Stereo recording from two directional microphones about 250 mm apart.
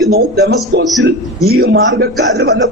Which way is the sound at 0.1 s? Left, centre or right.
Right.